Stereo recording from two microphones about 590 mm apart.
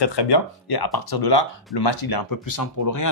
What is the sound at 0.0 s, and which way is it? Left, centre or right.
Speech, left.